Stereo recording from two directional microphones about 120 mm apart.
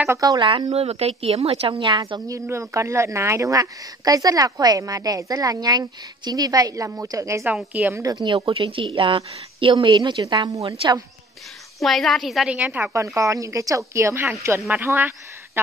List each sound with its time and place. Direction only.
0.1 s speech: 30° right (ahead or behind)
0.7 s speech: 60° right (ahead or behind); by 10.8 s 30° right (ahead or behind)
11.8 s a woman's voice: centre (ahead or behind)
12.5 s a woman's voice: 15° right (ahead or behind)